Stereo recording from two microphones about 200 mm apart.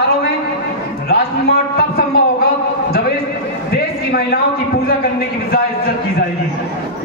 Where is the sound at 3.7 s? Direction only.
50° left (ahead or behind).